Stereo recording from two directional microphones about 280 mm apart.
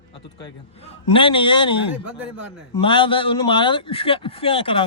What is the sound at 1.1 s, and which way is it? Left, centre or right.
A man's voice, centre.